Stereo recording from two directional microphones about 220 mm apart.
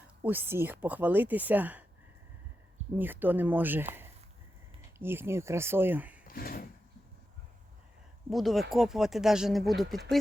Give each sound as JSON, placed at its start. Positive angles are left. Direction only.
{"t": 0.2, "sound": "a woman's voice", "side_deg": -10}
{"t": 2.9, "sound": "a woman's voice", "side_deg": -10}
{"t": 4.9, "sound": "a woman's voice", "side_deg": -10}
{"t": 6.2, "sound": "speech", "side_deg": 40}
{"t": 8.3, "sound": "speech", "side_deg": 0}